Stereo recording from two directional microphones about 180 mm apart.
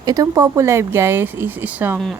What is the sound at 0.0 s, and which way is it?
Speech, 20° right (ahead or behind).